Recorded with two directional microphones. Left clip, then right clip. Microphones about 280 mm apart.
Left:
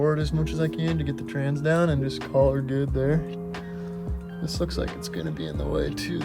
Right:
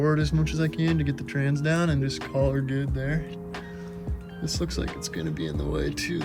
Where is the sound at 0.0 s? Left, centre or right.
Centre.